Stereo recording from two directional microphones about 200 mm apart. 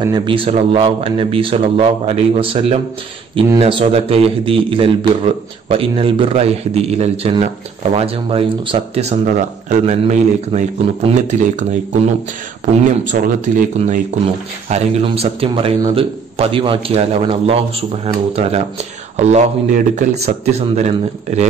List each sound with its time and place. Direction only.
0.0 s a man's voice: 20° right (ahead or behind)